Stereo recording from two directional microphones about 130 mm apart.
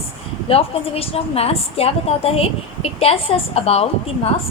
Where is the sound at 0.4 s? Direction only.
50° left (ahead or behind).